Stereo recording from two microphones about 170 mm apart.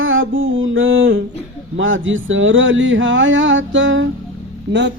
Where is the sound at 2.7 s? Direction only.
90° right.